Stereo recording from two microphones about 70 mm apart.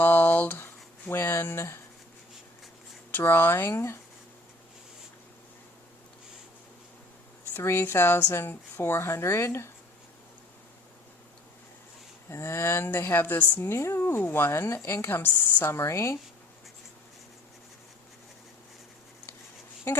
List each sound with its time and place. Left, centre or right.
0.0 s a sound: left
3.1 s speech: left
7.5 s speech: left
12.3 s speech: left